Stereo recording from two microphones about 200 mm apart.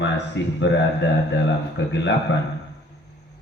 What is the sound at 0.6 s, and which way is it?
A man's voice, 60° left (ahead or behind).